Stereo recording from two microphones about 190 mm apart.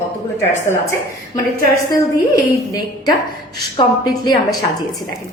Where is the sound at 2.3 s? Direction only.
20° left (ahead or behind).